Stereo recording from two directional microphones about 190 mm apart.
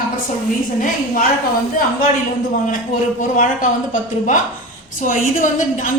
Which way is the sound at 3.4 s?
45° left (ahead or behind).